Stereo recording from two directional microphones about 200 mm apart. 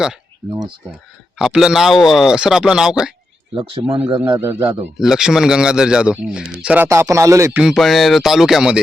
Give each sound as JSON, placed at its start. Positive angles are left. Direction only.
{"t": 0.5, "sound": "speech", "side_deg": -20}
{"t": 1.4, "sound": "speech", "side_deg": 0}
{"t": 3.5, "sound": "speech", "side_deg": -25}
{"t": 4.9, "sound": "speech", "side_deg": 0}
{"t": 7.6, "sound": "speech", "side_deg": 0}